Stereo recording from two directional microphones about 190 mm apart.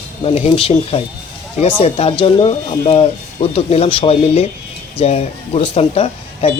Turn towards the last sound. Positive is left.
turn(degrees=35)  # may be behind; listen again after turning